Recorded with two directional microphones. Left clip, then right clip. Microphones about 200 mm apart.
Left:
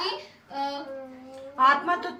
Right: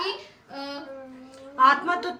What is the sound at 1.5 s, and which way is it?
Speech, 40° right (ahead or behind).